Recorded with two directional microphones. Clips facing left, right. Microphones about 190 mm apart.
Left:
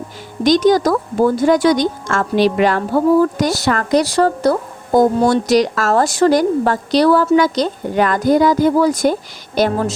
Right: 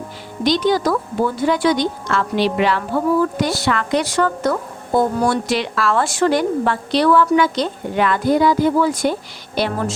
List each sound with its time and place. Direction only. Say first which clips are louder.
0.4 s a woman's voice: left 5 dB; 45° left (ahead or behind)